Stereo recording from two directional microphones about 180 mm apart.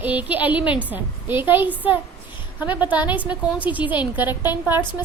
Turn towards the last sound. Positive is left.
turn(degrees=-10)  # may be behind; listen again after turning